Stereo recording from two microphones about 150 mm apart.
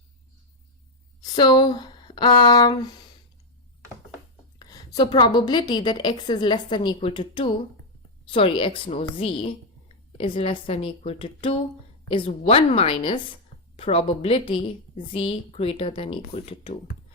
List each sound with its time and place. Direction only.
1.2 s speech: 25° left (ahead or behind)
4.6 s a woman's voice: 25° left (ahead or behind)